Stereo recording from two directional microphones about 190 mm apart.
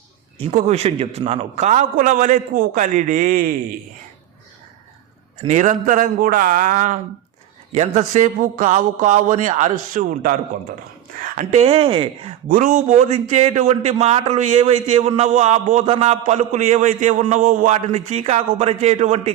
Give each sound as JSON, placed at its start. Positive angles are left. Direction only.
{"t": 0.3, "sound": "a man's voice", "side_deg": -30}
{"t": 5.5, "sound": "a man's voice", "side_deg": -40}
{"t": 12.5, "sound": "a man's voice", "side_deg": -45}